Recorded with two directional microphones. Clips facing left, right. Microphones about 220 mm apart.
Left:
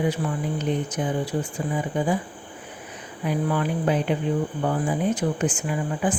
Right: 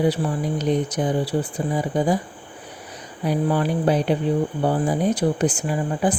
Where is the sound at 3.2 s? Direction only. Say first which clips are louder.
Right 3 dB; 35° right (ahead or behind).